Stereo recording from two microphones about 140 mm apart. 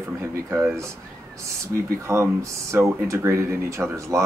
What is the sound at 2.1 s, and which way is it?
Speech, 20° right (ahead or behind).